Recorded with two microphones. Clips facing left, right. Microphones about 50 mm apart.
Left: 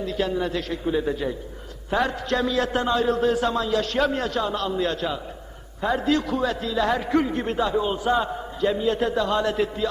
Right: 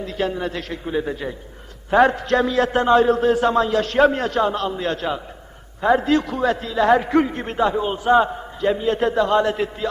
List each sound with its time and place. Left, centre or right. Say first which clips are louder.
0.0 s a man's voice: right 1 dB; right